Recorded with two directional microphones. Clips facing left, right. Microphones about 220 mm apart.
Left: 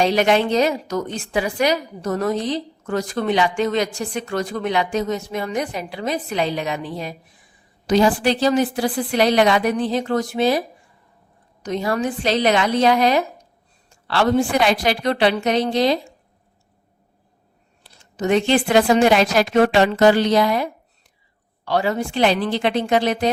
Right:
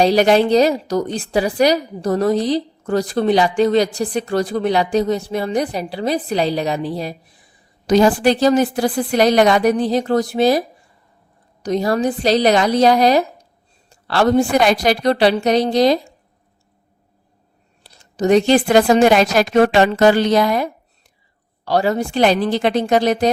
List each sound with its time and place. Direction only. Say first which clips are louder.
0.0 s a woman's voice: right 4 dB; 35° right (ahead or behind)
11.6 s a woman's voice: right 4 dB; 35° right (ahead or behind)
17.8 s a woman's voice: right 5 dB; 40° right (ahead or behind)